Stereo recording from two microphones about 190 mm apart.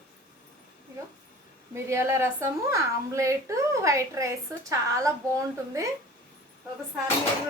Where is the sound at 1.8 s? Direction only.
15° right (ahead or behind).